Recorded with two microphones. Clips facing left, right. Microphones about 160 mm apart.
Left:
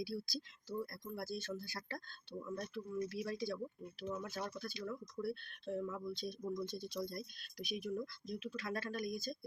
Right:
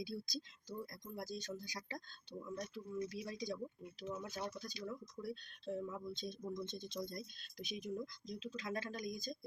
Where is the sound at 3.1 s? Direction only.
15° right (ahead or behind).